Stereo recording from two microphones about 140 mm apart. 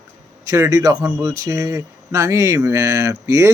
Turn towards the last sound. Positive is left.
turn(degrees=-20)  # may be behind; listen again after turning